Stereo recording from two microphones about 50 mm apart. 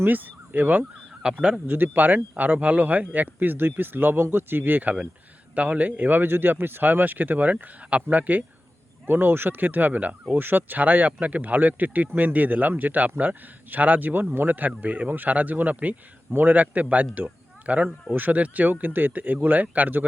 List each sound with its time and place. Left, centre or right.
0.0 s speech: right
1.2 s a man's voice: centre
1.6 s speech: right
9.0 s speech: right